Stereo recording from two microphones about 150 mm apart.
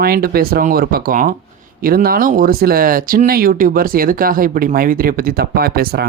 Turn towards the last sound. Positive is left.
turn(degrees=-90)